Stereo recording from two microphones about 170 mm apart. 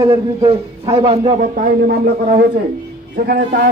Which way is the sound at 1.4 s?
55° right (ahead or behind).